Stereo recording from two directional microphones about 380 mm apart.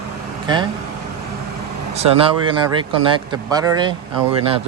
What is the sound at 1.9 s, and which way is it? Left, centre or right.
Speech, centre.